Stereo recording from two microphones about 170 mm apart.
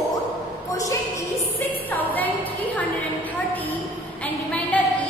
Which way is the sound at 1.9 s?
10° left (ahead or behind).